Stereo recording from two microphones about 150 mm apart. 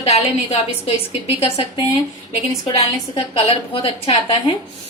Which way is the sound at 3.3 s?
40° left (ahead or behind).